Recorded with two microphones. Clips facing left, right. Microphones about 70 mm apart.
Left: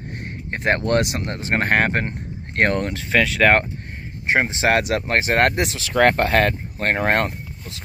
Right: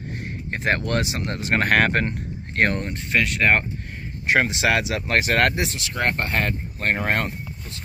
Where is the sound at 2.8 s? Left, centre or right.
Left.